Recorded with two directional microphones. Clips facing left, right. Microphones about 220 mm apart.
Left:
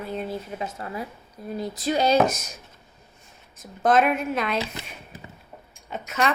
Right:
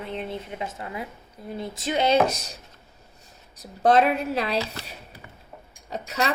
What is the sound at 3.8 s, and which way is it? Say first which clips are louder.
Speech: right 1 dB; 30° right (ahead or behind).